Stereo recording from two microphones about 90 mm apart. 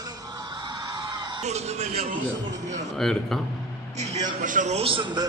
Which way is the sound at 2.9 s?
5° left (ahead or behind).